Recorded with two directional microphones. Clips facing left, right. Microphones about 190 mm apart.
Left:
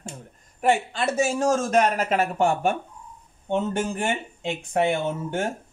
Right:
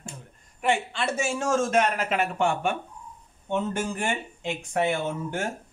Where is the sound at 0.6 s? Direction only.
40° left (ahead or behind).